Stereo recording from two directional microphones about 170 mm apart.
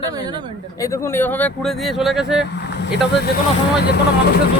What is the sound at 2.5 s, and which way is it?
Speech, 85° left.